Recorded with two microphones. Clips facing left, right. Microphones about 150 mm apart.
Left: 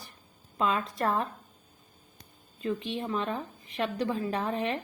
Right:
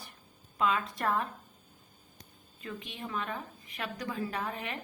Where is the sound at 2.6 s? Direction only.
30° left (ahead or behind).